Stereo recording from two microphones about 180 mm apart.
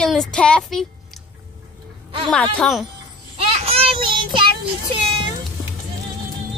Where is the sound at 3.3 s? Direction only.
35° right (ahead or behind).